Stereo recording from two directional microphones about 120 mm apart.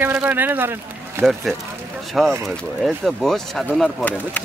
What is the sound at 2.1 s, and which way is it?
Speech, centre (ahead or behind).